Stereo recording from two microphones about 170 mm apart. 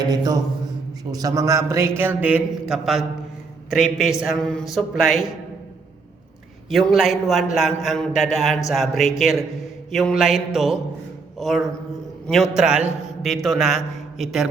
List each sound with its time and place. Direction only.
1.1 s a man's voice: 20° right (ahead or behind); by 5.3 s centre (ahead or behind)
6.7 s a man's voice: centre (ahead or behind)